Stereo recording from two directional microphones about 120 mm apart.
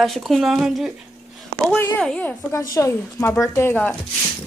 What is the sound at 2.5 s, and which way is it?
Speech, 25° left (ahead or behind).